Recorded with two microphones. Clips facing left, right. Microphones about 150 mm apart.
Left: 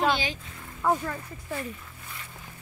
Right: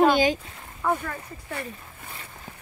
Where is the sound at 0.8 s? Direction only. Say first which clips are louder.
Even; 5° left (ahead or behind).